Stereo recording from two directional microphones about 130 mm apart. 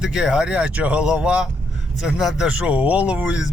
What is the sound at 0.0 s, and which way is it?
Speech, 5° right (ahead or behind).